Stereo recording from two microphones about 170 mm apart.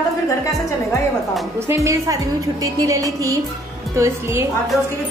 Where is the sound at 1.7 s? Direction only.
20° right (ahead or behind).